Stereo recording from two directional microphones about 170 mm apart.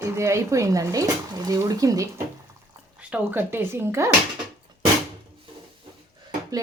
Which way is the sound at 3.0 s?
10° right (ahead or behind).